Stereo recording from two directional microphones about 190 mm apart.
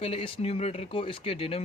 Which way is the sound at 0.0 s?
30° left (ahead or behind).